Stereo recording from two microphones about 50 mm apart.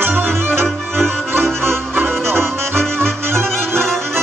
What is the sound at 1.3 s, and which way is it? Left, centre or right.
Music, right.